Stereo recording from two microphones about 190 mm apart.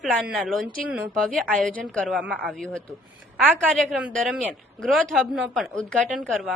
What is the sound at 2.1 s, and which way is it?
Speech, 5° right (ahead or behind).